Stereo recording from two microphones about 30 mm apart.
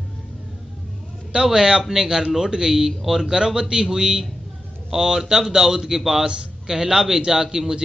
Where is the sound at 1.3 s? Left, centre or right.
Right.